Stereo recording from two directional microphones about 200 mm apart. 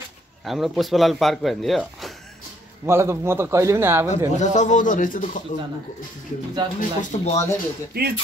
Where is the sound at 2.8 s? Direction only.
15° right (ahead or behind).